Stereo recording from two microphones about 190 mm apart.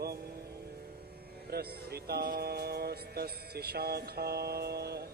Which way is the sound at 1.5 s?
55° right (ahead or behind).